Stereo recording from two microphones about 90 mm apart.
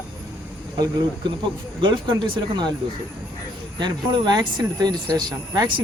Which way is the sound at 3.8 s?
55° right (ahead or behind).